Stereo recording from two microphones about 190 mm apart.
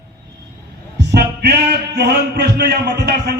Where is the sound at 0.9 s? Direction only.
60° right (ahead or behind).